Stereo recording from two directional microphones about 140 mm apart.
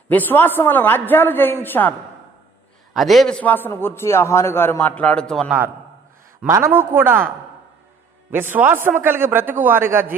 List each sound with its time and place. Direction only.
0.1 s a man's voice: 15° left (ahead or behind)
2.9 s a man's voice: centre (ahead or behind)
5.5 s a man's voice: 15° right (ahead or behind)
8.3 s a man's voice: 15° right (ahead or behind)